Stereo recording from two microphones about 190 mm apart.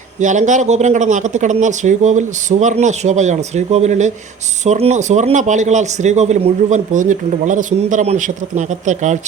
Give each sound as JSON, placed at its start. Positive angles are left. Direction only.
{"t": 0.2, "sound": "a man's voice", "side_deg": -40}